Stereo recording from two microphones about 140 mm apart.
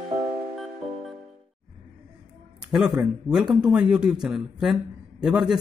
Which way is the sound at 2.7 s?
Centre (ahead or behind).